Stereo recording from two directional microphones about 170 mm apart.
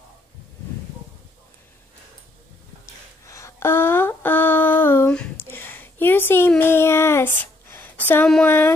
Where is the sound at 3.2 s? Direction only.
15° left (ahead or behind).